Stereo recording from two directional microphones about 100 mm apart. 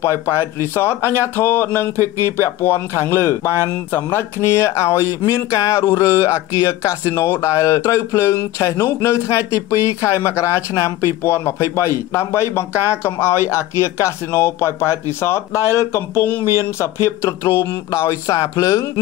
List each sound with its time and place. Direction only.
0.0 s speech: 25° left (ahead or behind)